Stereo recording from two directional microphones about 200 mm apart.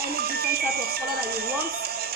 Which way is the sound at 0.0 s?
50° right (ahead or behind).